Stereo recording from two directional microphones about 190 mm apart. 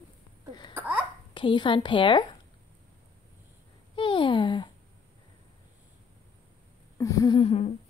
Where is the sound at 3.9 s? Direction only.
25° left (ahead or behind).